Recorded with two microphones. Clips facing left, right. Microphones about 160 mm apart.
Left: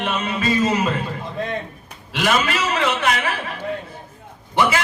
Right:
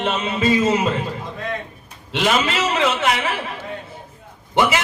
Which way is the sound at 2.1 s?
25° right (ahead or behind).